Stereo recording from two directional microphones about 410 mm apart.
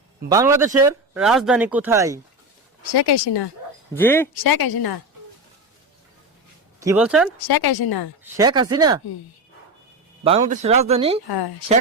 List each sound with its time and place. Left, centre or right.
0.3 s speech: centre
2.9 s speech: left
3.9 s speech: centre
4.4 s a woman's voice: left
6.7 s speech: centre
7.3 s a woman's voice: left
8.2 s speech: centre
10.2 s speech: centre
11.3 s a woman's voice: left